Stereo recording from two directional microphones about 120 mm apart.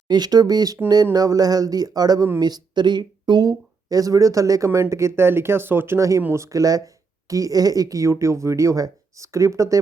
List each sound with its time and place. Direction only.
0.1 s speech: 35° right (ahead or behind)